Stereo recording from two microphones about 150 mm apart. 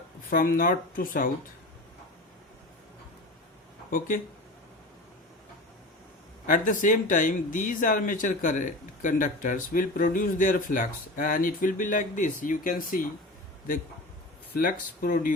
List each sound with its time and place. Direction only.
0.3 s speech: 70° left (ahead or behind)
6.5 s speech: 60° left (ahead or behind)
14.5 s speech: 70° left (ahead or behind)